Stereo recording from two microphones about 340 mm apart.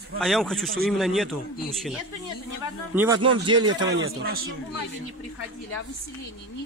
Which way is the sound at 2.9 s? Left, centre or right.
Centre.